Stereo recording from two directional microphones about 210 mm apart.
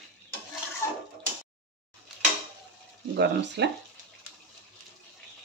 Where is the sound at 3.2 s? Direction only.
55° right (ahead or behind).